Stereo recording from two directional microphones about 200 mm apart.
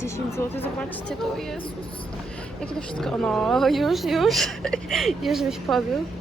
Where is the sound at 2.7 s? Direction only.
5° left (ahead or behind).